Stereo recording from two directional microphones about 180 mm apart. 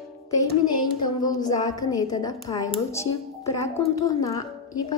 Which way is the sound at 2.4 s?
20° left (ahead or behind).